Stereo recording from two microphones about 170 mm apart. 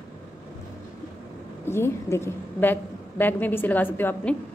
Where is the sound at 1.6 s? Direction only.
15° left (ahead or behind).